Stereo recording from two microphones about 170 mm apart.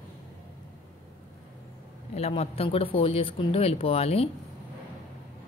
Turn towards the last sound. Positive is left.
turn(degrees=35)  # may be behind; listen again after turning